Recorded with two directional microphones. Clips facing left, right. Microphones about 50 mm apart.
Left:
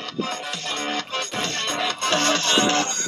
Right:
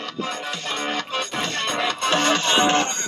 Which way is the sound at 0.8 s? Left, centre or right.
Centre.